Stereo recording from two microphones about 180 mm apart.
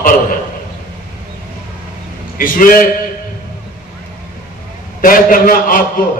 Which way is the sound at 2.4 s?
50° left (ahead or behind).